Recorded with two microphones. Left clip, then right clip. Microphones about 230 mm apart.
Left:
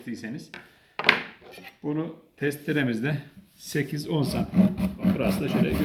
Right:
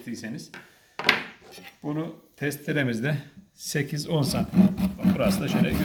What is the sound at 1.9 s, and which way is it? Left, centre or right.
Speech, right.